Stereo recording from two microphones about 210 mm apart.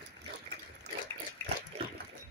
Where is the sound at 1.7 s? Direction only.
30° right (ahead or behind).